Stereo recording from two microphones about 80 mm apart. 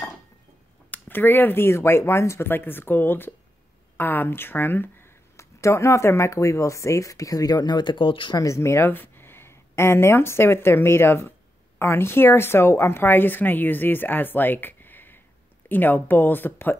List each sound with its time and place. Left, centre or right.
0.8 s a woman's voice: left
8.4 s a woman's voice: left